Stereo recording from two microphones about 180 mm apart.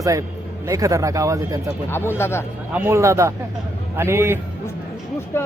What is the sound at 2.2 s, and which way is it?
Speech, 15° left (ahead or behind).